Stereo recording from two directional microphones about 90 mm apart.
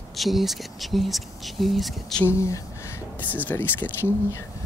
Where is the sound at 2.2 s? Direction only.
35° left (ahead or behind).